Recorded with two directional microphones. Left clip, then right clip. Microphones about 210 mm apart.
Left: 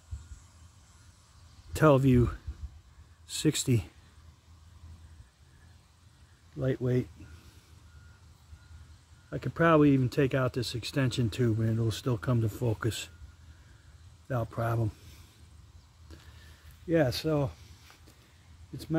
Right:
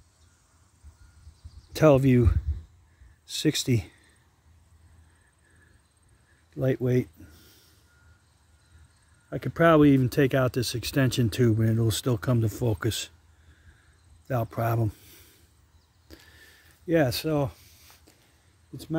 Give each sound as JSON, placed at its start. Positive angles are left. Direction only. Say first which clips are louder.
{"t": 1.7, "sound": "speech", "louder": "right 4 dB", "side_deg": -20}
{"t": 6.6, "sound": "speech", "louder": "right 5 dB", "side_deg": -50}
{"t": 9.3, "sound": "speech", "louder": "right 4 dB", "side_deg": -45}
{"t": 14.2, "sound": "speech", "louder": "right 4 dB", "side_deg": -35}
{"t": 16.1, "sound": "vehicle", "louder": "right 5 dB", "side_deg": -30}
{"t": 16.8, "sound": "speech", "louder": "right 3 dB", "side_deg": -55}